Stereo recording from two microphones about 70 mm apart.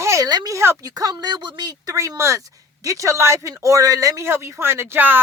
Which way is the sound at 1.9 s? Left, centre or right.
Right.